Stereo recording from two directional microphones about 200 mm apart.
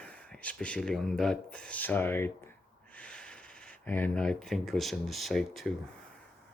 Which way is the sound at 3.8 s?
10° left (ahead or behind).